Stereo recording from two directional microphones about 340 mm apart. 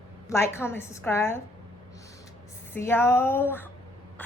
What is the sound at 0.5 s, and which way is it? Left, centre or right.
Speech, centre.